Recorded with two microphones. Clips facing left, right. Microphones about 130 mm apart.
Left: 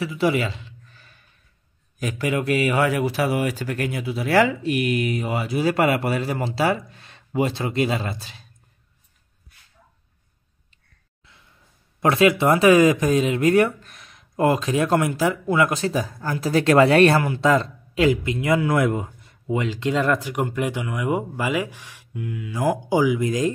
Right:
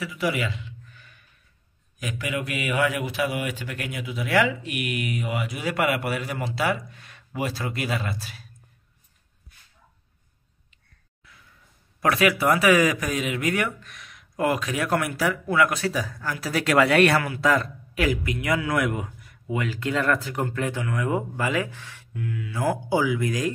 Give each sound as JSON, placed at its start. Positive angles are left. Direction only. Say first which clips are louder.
{"t": 0.0, "sound": "a sound", "louder": "left 5 dB", "side_deg": 30}
{"t": 2.0, "sound": "a man's voice", "louder": "left 6 dB", "side_deg": 35}
{"t": 12.0, "sound": "speech", "louder": "left 4 dB", "side_deg": 25}